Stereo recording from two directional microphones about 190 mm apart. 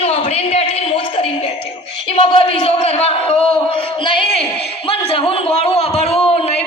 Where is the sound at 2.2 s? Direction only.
30° left (ahead or behind).